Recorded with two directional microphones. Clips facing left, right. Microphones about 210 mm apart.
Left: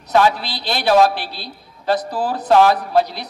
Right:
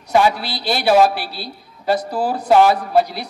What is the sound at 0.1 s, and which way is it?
A man's voice, 10° right (ahead or behind).